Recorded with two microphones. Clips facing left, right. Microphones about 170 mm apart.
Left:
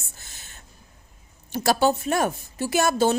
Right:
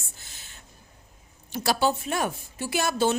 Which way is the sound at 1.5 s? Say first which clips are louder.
Left 4 dB; 45° left (ahead or behind).